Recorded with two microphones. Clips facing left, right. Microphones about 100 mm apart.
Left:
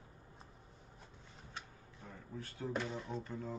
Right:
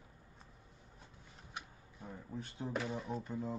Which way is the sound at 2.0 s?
20° right (ahead or behind).